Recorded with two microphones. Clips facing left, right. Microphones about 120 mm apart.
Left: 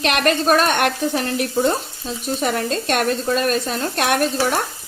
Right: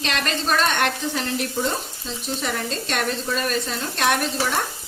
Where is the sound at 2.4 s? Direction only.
50° left (ahead or behind).